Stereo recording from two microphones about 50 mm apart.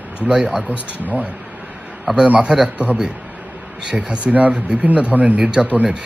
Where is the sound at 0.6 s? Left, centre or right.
Right.